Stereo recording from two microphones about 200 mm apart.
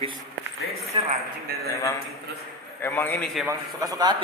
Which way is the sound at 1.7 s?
15° left (ahead or behind).